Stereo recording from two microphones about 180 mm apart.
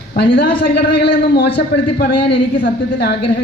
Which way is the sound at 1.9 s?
55° left (ahead or behind).